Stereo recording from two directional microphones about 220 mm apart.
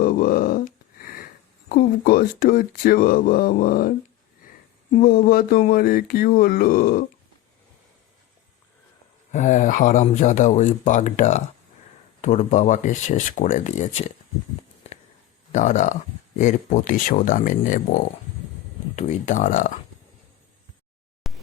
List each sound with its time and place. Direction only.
0.0 s a sound: 40° left (ahead or behind)
1.7 s speech: 40° left (ahead or behind)
9.3 s speech: 35° left (ahead or behind)
15.5 s speech: 35° left (ahead or behind)
18.9 s speech: 35° left (ahead or behind)
21.2 s a sound: centre (ahead or behind)